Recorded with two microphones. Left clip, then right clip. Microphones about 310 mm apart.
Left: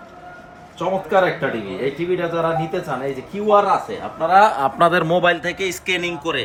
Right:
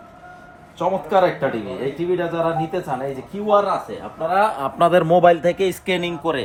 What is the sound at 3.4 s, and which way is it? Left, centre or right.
A man's voice, centre.